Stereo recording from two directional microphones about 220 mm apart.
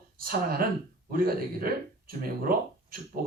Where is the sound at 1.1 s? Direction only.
40° right (ahead or behind).